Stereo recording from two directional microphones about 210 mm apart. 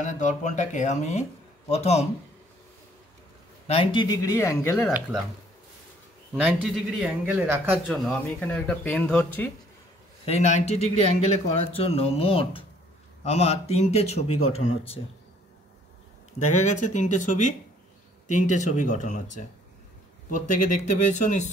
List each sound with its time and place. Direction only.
0.0 s speech: 35° left (ahead or behind)
3.6 s speech: 25° left (ahead or behind)
4.7 s a man's voice: centre (ahead or behind)
6.4 s a man's voice: 5° right (ahead or behind)
10.2 s speech: 30° left (ahead or behind)
16.3 s speech: 35° left (ahead or behind)